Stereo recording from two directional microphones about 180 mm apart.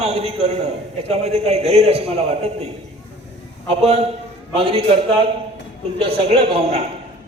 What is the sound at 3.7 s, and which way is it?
A man's voice, 35° right (ahead or behind).